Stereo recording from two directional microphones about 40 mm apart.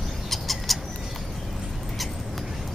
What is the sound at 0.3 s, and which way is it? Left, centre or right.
Bird, centre.